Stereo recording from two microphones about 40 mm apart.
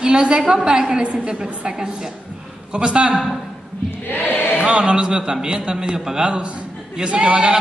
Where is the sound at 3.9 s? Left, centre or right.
Left.